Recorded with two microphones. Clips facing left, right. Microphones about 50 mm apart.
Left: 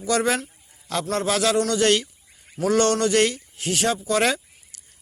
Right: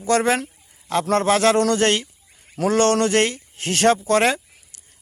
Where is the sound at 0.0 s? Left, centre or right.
Right.